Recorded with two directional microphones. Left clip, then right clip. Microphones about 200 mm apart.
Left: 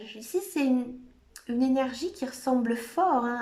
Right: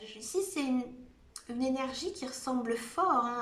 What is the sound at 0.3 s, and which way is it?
Speech, 35° left (ahead or behind).